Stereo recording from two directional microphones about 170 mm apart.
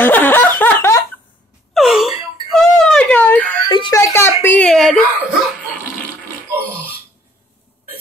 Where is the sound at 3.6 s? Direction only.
25° left (ahead or behind).